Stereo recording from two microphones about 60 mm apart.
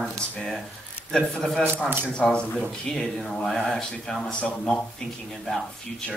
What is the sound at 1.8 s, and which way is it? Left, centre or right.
Speech, right.